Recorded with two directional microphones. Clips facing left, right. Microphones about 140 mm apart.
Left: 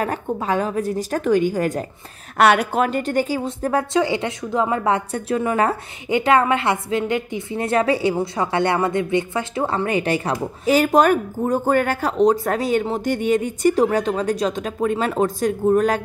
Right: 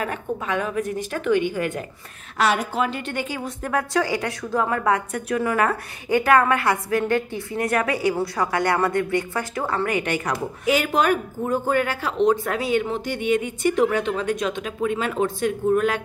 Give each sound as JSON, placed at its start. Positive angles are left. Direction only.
{"t": 0.0, "sound": "speech", "side_deg": 35}
{"t": 2.3, "sound": "a woman's voice", "side_deg": 65}
{"t": 2.8, "sound": "a woman's voice", "side_deg": 45}